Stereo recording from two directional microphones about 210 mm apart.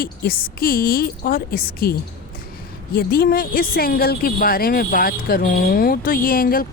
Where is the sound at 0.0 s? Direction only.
45° left (ahead or behind).